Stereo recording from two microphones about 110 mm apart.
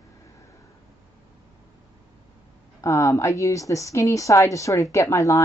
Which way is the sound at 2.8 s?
30° left (ahead or behind).